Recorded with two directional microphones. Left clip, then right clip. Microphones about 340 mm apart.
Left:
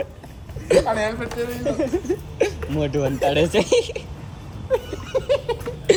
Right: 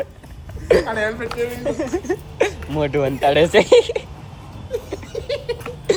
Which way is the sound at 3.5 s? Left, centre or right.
Centre.